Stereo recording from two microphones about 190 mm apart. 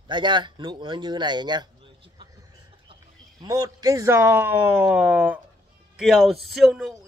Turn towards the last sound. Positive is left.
turn(degrees=0)  # may be behind; listen again after turning